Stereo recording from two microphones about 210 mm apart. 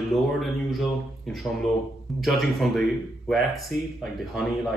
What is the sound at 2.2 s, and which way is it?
Speech, centre (ahead or behind).